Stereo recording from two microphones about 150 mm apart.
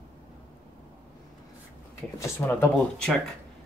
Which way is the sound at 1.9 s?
15° left (ahead or behind).